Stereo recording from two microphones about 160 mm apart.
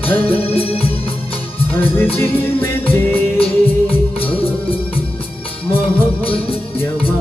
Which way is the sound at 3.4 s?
35° left (ahead or behind).